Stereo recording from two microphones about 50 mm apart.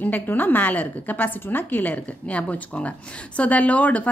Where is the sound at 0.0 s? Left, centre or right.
Left.